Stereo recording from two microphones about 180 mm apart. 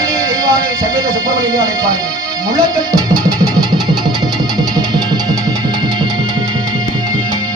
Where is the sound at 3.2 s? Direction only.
20° right (ahead or behind).